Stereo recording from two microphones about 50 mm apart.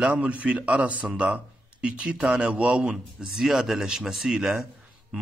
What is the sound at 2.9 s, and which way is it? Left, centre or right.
Speech, centre.